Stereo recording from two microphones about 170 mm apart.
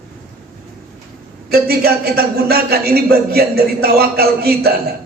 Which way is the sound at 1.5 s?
65° right (ahead or behind).